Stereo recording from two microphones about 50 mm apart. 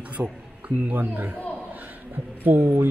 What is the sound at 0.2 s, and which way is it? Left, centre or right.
A man's voice, right.